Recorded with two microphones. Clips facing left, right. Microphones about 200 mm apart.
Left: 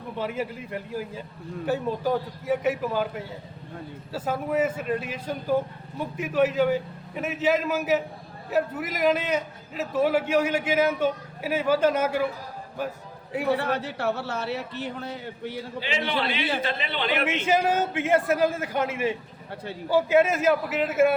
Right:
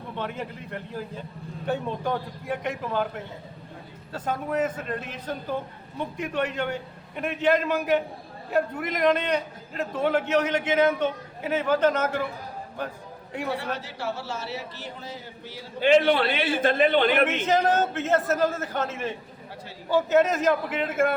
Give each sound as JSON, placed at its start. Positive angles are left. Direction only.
{"t": 0.2, "sound": "a man's voice", "side_deg": 5}
{"t": 13.6, "sound": "speech", "side_deg": 60}
{"t": 15.8, "sound": "a man's voice", "side_deg": -50}
{"t": 17.2, "sound": "a man's voice", "side_deg": 10}